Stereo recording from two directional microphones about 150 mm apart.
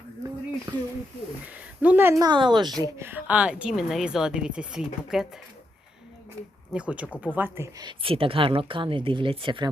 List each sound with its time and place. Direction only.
0.7 s a sound: 30° right (ahead or behind)
1.5 s speech: 10° right (ahead or behind)
2.2 s a woman's voice: 30° right (ahead or behind)
2.8 s speech: 15° right (ahead or behind)
6.7 s speech: 10° right (ahead or behind)
7.9 s speech: 35° right (ahead or behind)